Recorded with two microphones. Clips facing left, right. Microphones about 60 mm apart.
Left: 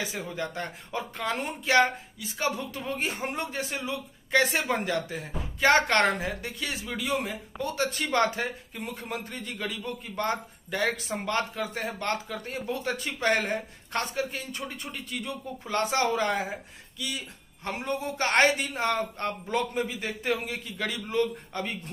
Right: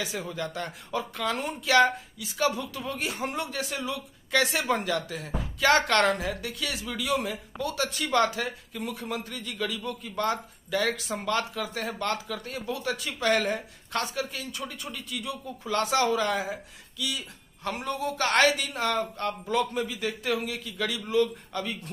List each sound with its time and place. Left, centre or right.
0.0 s speech: left
17.6 s a man's voice: left